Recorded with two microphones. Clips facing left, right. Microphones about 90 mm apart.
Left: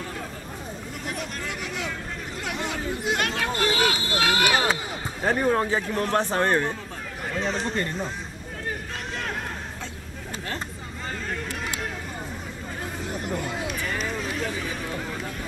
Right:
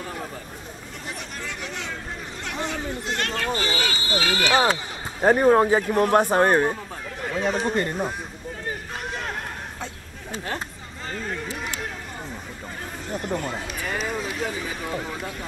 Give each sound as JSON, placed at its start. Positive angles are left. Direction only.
{"t": 2.4, "sound": "a sound", "side_deg": 5}
{"t": 5.3, "sound": "speech", "side_deg": -25}
{"t": 5.8, "sound": "speech", "side_deg": -10}
{"t": 7.2, "sound": "speech", "side_deg": -5}
{"t": 8.6, "sound": "boat", "side_deg": -5}
{"t": 13.9, "sound": "speech", "side_deg": 0}